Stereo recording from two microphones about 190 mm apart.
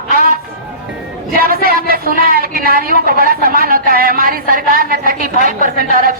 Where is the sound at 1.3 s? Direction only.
50° right (ahead or behind).